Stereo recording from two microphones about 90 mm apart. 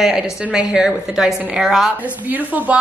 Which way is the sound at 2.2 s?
20° right (ahead or behind).